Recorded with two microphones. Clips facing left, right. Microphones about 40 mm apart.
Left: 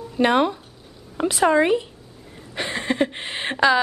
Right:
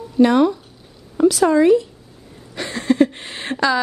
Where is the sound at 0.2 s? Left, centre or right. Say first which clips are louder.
Right 5 dB; left.